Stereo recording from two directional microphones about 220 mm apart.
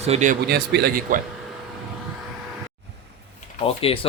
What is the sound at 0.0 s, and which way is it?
Speech, 30° right (ahead or behind).